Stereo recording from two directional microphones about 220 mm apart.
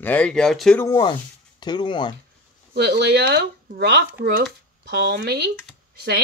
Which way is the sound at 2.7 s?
50° right (ahead or behind).